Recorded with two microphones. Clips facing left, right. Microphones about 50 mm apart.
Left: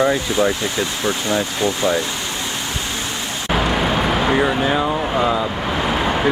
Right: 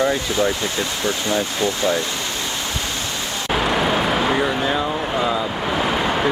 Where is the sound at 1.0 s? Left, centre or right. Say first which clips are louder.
Left 1 dB; left.